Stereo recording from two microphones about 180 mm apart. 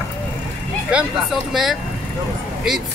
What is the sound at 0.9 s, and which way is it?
Speech, 5° right (ahead or behind).